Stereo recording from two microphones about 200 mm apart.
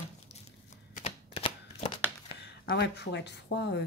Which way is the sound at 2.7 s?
55° left (ahead or behind).